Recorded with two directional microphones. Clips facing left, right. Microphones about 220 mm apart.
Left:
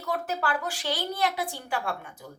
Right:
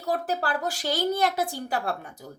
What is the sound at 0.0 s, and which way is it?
A woman's voice, 35° right (ahead or behind).